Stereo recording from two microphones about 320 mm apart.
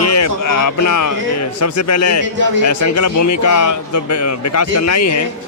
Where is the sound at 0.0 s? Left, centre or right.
Left.